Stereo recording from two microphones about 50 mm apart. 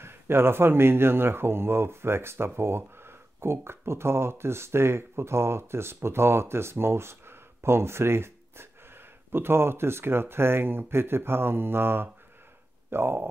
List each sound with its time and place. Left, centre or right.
0.0 s a man's voice: right